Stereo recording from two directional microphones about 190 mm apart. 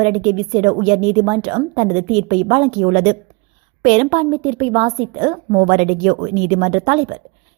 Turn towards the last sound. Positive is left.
turn(degrees=-30)  # may be behind; listen again after turning